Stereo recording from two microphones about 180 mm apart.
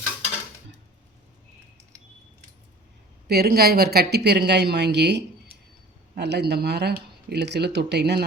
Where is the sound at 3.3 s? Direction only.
60° right (ahead or behind).